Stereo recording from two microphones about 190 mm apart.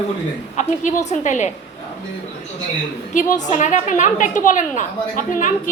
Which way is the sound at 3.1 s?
40° left (ahead or behind).